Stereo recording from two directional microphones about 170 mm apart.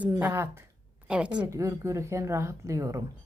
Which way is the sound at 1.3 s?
20° right (ahead or behind).